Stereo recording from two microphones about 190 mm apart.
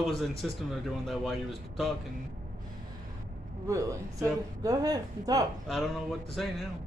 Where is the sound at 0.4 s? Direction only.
Centre (ahead or behind).